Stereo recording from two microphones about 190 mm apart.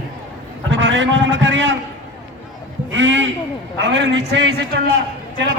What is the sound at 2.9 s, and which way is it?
A man's voice, 75° right (ahead or behind).